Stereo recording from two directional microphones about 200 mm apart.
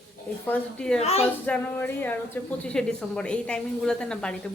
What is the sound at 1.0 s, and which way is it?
Speech, 30° left (ahead or behind).